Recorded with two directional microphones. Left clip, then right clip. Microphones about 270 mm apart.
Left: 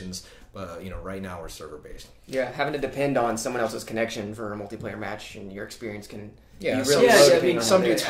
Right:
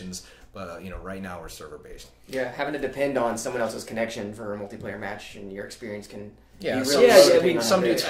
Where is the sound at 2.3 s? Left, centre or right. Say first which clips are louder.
Left 2 dB; left.